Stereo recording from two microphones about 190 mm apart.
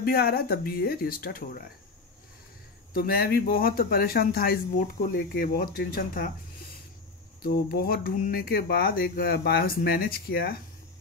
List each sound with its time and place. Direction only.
0.0 s speech: 55° left (ahead or behind)
2.9 s speech: 50° left (ahead or behind)
7.4 s speech: 50° left (ahead or behind)